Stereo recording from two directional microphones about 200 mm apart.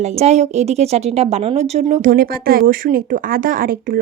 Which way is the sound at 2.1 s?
45° right (ahead or behind).